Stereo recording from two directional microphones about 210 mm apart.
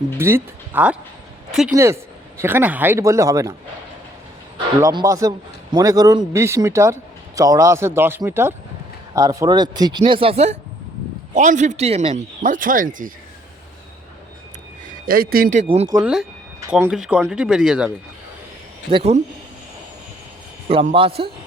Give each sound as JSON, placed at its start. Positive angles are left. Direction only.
{"t": 0.2, "sound": "a man's voice", "side_deg": -10}
{"t": 1.5, "sound": "a sound", "side_deg": -5}
{"t": 1.7, "sound": "a man's voice", "side_deg": -15}
{"t": 4.5, "sound": "a man's voice", "side_deg": -20}
{"t": 15.0, "sound": "speech", "side_deg": -45}
{"t": 15.6, "sound": "speech", "side_deg": -30}
{"t": 15.9, "sound": "a man's voice", "side_deg": -10}
{"t": 18.9, "sound": "speech", "side_deg": -30}
{"t": 20.7, "sound": "speech", "side_deg": -25}